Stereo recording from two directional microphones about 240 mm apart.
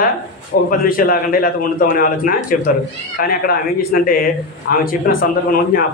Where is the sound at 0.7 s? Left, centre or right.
Left.